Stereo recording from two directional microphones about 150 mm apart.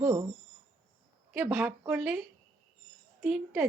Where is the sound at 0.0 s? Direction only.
20° right (ahead or behind).